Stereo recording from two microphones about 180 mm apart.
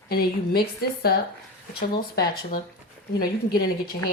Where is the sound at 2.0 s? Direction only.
55° left (ahead or behind).